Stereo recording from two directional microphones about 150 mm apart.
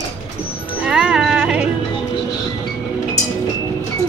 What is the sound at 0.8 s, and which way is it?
Music, 5° right (ahead or behind).